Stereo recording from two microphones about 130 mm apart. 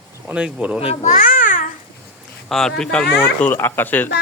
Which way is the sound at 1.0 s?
80° left.